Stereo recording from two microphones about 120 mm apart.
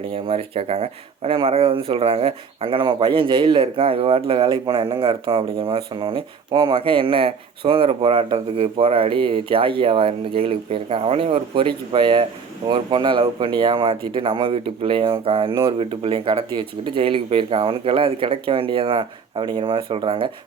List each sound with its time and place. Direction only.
0.1 s speech: 50° right (ahead or behind)